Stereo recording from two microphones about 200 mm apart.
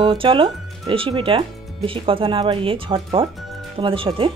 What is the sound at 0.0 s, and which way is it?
Speech, 25° right (ahead or behind).